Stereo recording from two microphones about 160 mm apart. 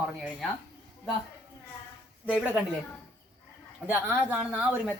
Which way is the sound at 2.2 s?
5° right (ahead or behind).